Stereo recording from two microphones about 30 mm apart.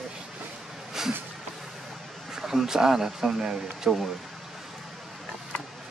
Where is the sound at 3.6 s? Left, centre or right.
Centre.